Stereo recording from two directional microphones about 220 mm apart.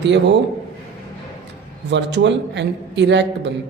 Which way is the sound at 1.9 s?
50° right (ahead or behind).